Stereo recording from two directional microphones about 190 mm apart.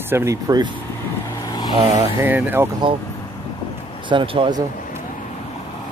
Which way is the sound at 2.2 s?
10° right (ahead or behind).